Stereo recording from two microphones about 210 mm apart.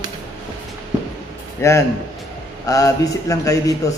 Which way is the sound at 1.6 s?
15° left (ahead or behind).